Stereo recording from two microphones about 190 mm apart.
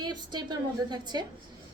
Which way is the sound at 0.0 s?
20° right (ahead or behind).